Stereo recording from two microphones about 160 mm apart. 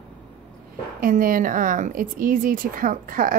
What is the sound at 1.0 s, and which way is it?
Speech, 60° right (ahead or behind).